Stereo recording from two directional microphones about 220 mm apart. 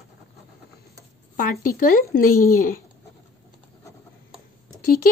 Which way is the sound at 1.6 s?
40° left (ahead or behind).